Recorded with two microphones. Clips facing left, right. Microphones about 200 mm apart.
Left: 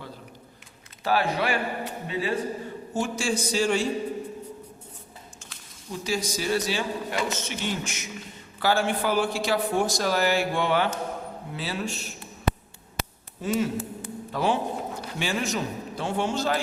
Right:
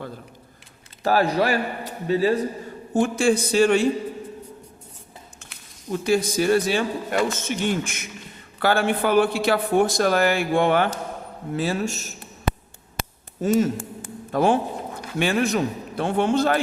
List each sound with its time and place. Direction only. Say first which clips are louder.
1.0 s a man's voice: right 5 dB; 40° right (ahead or behind)
2.9 s speech: right 8 dB; 55° right (ahead or behind)
5.9 s a man's voice: right 8 dB; 55° right (ahead or behind)
13.0 s a sound: right 6 dB; 45° right (ahead or behind)
15.2 s speech: right 7 dB; 60° right (ahead or behind)